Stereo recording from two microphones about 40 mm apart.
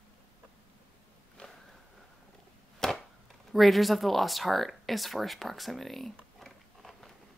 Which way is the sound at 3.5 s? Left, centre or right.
Centre.